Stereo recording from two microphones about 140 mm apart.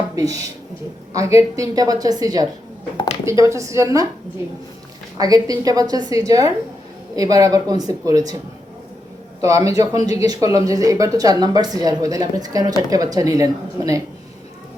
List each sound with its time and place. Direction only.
0.2 s speech: 25° right (ahead or behind)
5.1 s speech: 25° right (ahead or behind)
9.4 s speech: 25° right (ahead or behind)